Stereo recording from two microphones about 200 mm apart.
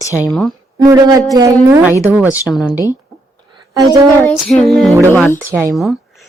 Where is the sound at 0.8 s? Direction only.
20° right (ahead or behind).